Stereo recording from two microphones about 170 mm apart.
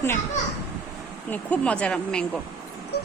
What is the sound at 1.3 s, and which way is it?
A woman's voice, 10° left (ahead or behind).